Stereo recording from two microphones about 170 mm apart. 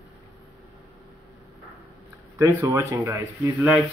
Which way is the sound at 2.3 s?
20° right (ahead or behind).